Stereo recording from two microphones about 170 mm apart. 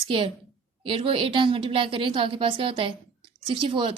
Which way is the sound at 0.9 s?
30° right (ahead or behind).